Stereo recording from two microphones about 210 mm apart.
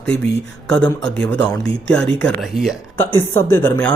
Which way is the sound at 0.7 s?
5° left (ahead or behind).